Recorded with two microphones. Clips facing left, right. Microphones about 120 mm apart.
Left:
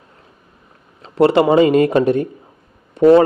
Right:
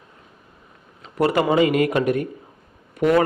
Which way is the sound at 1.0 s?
30° left (ahead or behind).